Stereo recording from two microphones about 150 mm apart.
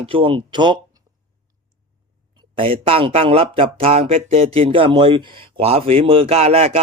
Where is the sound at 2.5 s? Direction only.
40° right (ahead or behind).